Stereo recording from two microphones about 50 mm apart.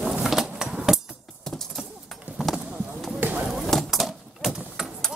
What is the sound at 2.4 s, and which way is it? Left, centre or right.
Clip-clop, centre.